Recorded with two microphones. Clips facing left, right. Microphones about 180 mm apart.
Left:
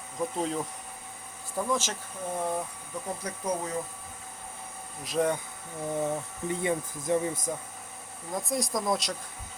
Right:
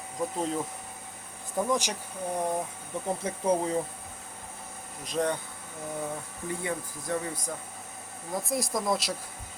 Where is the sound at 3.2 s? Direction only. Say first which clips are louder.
Right 6 dB; 30° right (ahead or behind).